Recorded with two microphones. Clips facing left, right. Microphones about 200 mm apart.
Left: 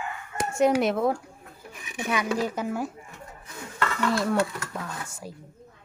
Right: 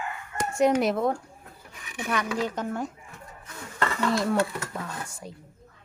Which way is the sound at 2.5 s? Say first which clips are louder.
Left 1 dB; 5° left (ahead or behind).